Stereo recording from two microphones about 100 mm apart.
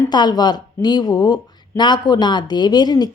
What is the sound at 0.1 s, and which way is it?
Speech, 45° left (ahead or behind).